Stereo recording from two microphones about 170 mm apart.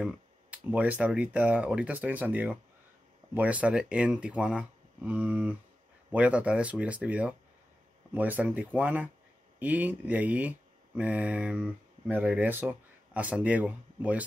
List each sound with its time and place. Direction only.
0.0 s speech: 10° right (ahead or behind)